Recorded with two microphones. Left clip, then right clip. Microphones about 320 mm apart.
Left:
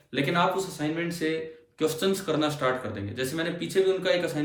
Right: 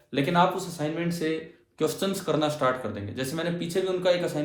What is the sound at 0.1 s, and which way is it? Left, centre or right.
A man's voice, centre.